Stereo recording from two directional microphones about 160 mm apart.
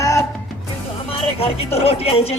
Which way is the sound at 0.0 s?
20° left (ahead or behind).